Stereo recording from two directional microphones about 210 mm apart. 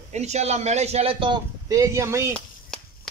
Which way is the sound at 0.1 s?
30° right (ahead or behind).